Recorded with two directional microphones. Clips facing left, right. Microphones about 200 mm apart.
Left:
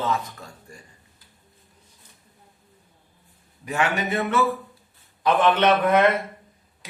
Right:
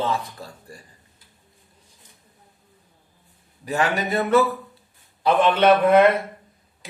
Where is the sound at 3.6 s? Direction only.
35° right (ahead or behind).